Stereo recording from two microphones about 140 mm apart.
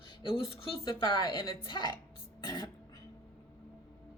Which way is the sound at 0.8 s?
35° left (ahead or behind).